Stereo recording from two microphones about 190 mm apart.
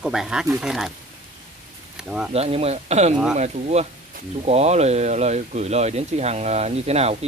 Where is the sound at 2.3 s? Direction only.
30° right (ahead or behind).